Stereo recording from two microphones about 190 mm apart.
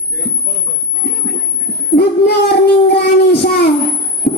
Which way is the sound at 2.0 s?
60° left (ahead or behind).